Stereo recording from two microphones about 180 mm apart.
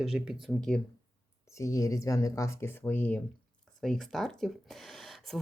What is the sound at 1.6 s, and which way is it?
Speech, 20° left (ahead or behind).